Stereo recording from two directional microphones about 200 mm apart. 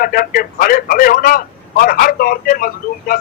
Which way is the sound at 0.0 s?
45° left (ahead or behind).